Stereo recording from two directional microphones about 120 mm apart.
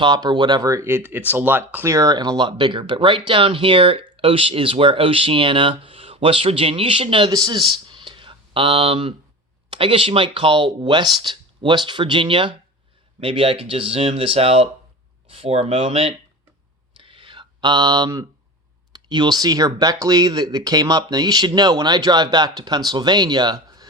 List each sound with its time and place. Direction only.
0.0 s speech: 35° right (ahead or behind)
7.3 s speech: 30° right (ahead or behind); by 16.1 s 55° right (ahead or behind)
17.0 s a sound: 45° right (ahead or behind)
18.9 s speech: 35° right (ahead or behind)